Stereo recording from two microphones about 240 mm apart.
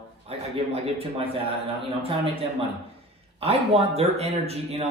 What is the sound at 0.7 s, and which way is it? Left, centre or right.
Speech, right.